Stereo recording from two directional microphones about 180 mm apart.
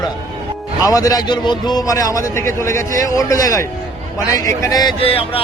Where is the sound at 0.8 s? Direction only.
20° left (ahead or behind).